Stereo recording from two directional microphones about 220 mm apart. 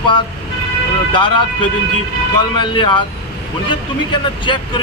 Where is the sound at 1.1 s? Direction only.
20° left (ahead or behind).